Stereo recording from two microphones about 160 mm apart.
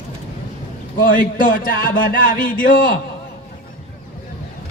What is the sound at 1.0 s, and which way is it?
Speech, 60° left (ahead or behind).